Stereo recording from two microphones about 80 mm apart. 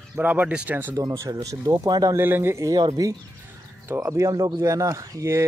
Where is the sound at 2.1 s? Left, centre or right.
Right.